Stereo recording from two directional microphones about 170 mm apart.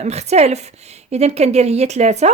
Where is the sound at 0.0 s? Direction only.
40° right (ahead or behind).